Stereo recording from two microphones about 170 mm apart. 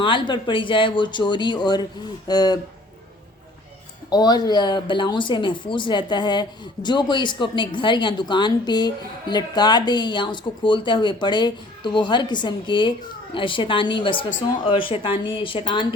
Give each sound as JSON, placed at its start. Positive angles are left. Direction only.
{"t": 0.0, "sound": "speech", "side_deg": 30}
{"t": 4.1, "sound": "speech", "side_deg": 25}